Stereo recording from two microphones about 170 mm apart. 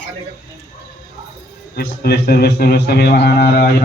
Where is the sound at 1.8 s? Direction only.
65° left (ahead or behind).